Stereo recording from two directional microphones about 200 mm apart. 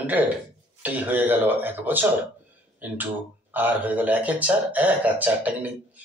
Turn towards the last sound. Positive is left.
turn(degrees=-10)  # may be behind; listen again after turning